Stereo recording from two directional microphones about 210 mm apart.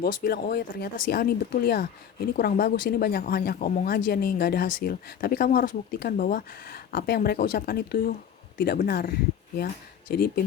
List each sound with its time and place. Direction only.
0.0 s speech: 45° left (ahead or behind)